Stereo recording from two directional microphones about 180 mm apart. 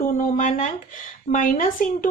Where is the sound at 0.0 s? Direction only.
45° left (ahead or behind).